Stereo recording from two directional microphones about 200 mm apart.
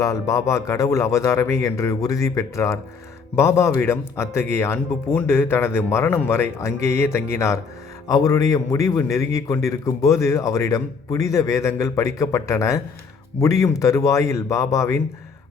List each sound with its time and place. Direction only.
0.0 s a man's voice: 15° left (ahead or behind)